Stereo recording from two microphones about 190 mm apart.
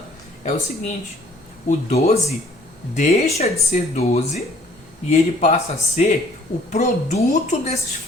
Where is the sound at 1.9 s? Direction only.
35° left (ahead or behind).